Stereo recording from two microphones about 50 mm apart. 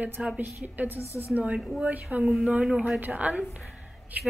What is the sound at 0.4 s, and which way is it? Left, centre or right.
Speech, right.